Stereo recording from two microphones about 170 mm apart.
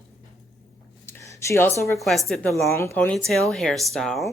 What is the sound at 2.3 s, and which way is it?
Speech, centre (ahead or behind).